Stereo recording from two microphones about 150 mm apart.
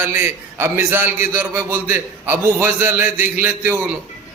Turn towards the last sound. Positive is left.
turn(degrees=-10)  # may be behind; listen again after turning